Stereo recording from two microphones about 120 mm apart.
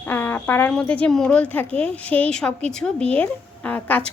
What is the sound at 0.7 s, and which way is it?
Speech, 10° left (ahead or behind).